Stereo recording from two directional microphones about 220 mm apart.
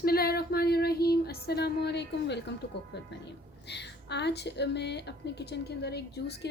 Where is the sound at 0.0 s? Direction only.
45° left (ahead or behind).